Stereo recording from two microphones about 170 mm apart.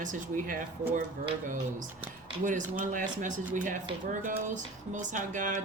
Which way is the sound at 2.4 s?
50° right (ahead or behind).